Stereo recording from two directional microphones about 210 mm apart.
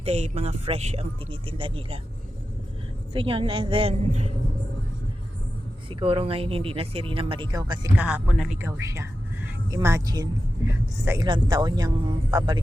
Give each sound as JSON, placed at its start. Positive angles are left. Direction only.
{"t": 0.0, "sound": "speech", "side_deg": -30}
{"t": 3.1, "sound": "speech", "side_deg": -25}
{"t": 5.9, "sound": "speech", "side_deg": -25}
{"t": 7.9, "sound": "speech", "side_deg": -5}